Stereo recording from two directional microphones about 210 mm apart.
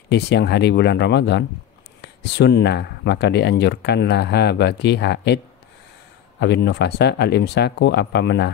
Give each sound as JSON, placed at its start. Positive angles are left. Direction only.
{"t": 0.1, "sound": "speech", "side_deg": 55}
{"t": 6.4, "sound": "speech", "side_deg": 55}